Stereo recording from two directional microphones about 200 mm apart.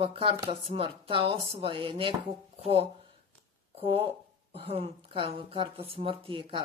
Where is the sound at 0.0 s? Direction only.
25° right (ahead or behind).